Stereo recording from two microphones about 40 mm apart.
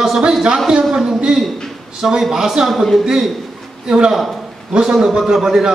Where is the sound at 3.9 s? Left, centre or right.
Centre.